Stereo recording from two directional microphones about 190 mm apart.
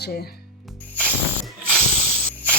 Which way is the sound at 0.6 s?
5° left (ahead or behind).